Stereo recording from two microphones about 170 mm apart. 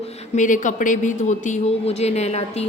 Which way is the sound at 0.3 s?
50° left (ahead or behind).